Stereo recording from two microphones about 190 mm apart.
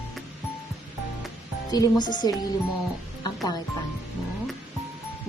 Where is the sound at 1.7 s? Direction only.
20° left (ahead or behind).